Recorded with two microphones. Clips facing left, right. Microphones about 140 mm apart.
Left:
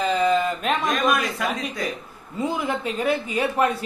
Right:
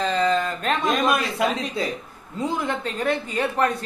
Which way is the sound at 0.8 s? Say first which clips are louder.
Right 2 dB; 25° right (ahead or behind).